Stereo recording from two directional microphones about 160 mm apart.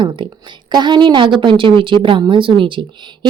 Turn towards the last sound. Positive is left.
turn(degrees=-30)  # may be behind; listen again after turning